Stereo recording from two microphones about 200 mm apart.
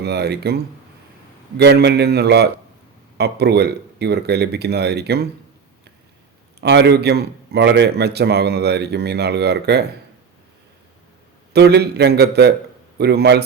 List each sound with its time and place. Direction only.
0.0 s a man's voice: 55° right (ahead or behind)
1.5 s a man's voice: 55° right (ahead or behind)
6.6 s a man's voice: 60° right (ahead or behind)
11.5 s a man's voice: 55° right (ahead or behind)